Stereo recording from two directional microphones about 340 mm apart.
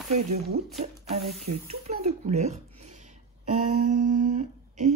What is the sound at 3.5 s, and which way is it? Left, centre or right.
Humming, right.